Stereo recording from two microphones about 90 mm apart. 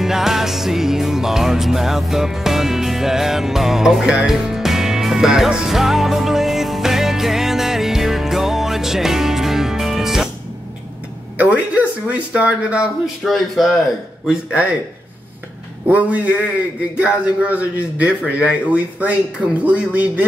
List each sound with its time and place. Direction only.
0.0 s music: 5° right (ahead or behind)
11.3 s a man's voice: 15° right (ahead or behind)
15.9 s a man's voice: 15° right (ahead or behind)